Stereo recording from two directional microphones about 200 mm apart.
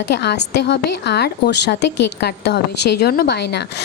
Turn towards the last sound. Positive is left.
turn(degrees=55)  # may be behind; listen again after turning